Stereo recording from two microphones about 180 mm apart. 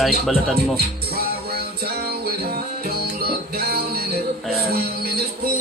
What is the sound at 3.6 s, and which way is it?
Music, 60° right (ahead or behind).